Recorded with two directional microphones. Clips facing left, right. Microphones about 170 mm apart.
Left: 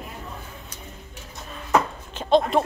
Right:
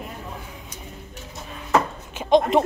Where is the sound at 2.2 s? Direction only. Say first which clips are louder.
Right 2 dB; 15° right (ahead or behind).